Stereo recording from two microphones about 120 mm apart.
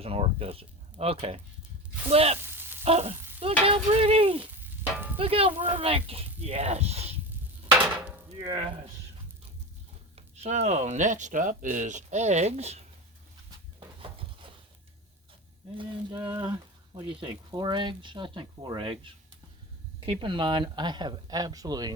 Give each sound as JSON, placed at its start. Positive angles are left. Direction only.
{"t": 0.0, "sound": "speech", "side_deg": -55}
{"t": 2.4, "sound": "frying", "side_deg": -20}
{"t": 2.8, "sound": "speech", "side_deg": -60}
{"t": 3.6, "sound": "stir", "side_deg": -50}
{"t": 5.1, "sound": "speech", "side_deg": -50}
{"t": 8.4, "sound": "stir", "side_deg": -45}
{"t": 10.2, "sound": "speech", "side_deg": -65}
{"t": 13.7, "sound": "a sound", "side_deg": -45}
{"t": 15.8, "sound": "speech", "side_deg": -40}